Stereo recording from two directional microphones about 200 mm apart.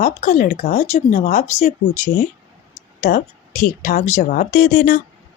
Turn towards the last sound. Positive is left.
turn(degrees=45)  # may be behind; listen again after turning